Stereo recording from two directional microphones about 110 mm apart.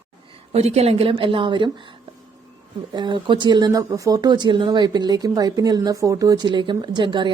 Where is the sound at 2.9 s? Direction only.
45° right (ahead or behind).